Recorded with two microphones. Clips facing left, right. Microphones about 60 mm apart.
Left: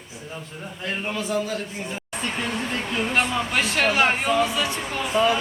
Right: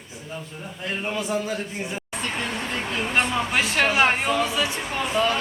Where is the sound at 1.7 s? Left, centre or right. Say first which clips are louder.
Right 1 dB; centre.